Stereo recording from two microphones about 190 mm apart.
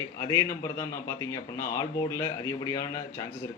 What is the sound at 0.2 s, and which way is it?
Speech, 15° left (ahead or behind).